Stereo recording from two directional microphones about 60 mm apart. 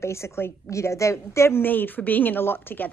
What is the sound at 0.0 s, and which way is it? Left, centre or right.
A woman's voice, left.